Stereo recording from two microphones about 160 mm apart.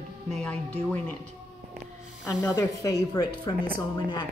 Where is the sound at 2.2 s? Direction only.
20° left (ahead or behind).